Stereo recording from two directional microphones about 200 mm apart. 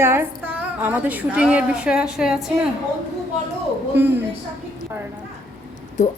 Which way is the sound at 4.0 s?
10° right (ahead or behind).